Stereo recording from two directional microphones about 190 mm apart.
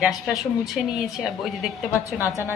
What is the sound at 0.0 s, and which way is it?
A woman's voice, centre (ahead or behind).